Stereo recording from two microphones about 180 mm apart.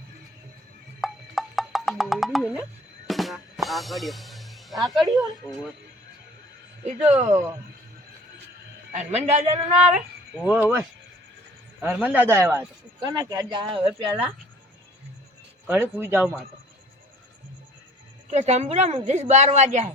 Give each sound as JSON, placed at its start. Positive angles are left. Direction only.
{"t": 1.0, "sound": "wood block", "side_deg": 0}
{"t": 3.1, "sound": "music", "side_deg": 0}
{"t": 6.8, "sound": "a woman's voice", "side_deg": -40}
{"t": 7.3, "sound": "speech", "side_deg": -15}
{"t": 8.9, "sound": "a woman's voice", "side_deg": -40}
{"t": 10.3, "sound": "speech", "side_deg": -5}
{"t": 11.9, "sound": "speech", "side_deg": -10}
{"t": 13.0, "sound": "speech", "side_deg": -25}
{"t": 15.6, "sound": "speech", "side_deg": -10}
{"t": 18.3, "sound": "a woman's voice", "side_deg": -40}